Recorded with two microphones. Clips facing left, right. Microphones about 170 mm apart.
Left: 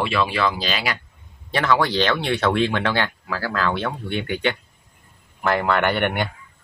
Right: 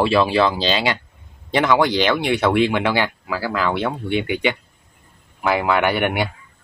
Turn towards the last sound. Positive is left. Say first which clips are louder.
# right 2 dB
turn(degrees=-10)  # may be behind; listen again after turning